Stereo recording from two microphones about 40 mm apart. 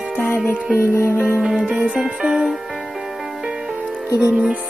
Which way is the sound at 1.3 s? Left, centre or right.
Centre.